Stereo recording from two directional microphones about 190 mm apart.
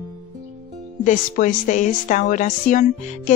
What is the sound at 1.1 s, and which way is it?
A woman's voice, 45° left (ahead or behind).